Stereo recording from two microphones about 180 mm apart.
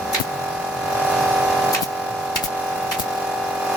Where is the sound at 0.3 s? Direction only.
Centre (ahead or behind).